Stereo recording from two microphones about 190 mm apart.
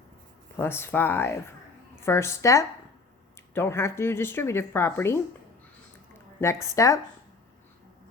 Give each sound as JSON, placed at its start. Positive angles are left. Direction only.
{"t": 0.5, "sound": "speech", "side_deg": 10}
{"t": 6.4, "sound": "speech", "side_deg": 15}